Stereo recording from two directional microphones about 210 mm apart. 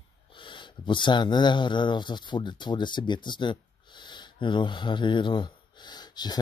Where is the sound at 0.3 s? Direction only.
25° left (ahead or behind).